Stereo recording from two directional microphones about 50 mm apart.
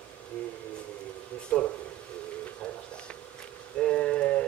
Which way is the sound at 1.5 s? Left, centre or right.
Left.